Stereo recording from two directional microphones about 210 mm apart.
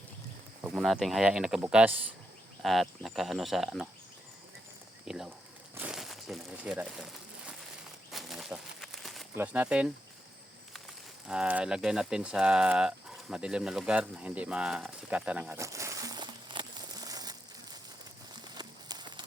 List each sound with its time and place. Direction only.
0.6 s speech: centre (ahead or behind)
5.0 s speech: centre (ahead or behind)
5.7 s crumpling: 5° right (ahead or behind)
8.1 s bird: centre (ahead or behind)
9.3 s speech: 10° right (ahead or behind)
11.3 s speech: 5° right (ahead or behind)
18.4 s a sound: 20° right (ahead or behind)